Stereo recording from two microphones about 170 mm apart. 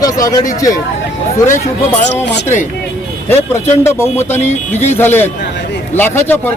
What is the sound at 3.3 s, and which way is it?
A man's voice, 15° left (ahead or behind).